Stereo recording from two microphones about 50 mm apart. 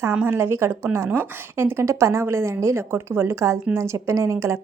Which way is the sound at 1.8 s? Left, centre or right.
Right.